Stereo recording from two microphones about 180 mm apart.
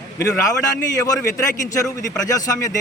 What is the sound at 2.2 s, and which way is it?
Speech, 20° left (ahead or behind).